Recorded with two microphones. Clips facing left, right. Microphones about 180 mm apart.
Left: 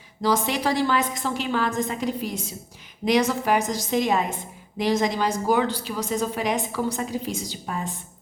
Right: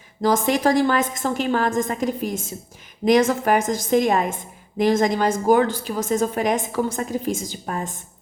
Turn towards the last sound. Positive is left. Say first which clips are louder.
# right 2 dB
turn(degrees=-50)  # may be behind; listen again after turning